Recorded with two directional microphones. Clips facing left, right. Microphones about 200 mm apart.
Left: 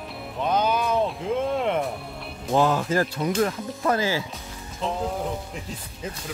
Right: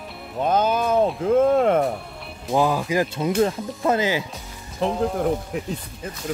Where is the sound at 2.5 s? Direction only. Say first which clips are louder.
Right 1 dB; 10° right (ahead or behind).